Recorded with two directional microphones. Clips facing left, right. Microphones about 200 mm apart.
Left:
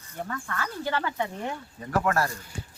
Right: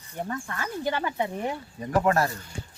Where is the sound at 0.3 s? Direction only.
25° right (ahead or behind).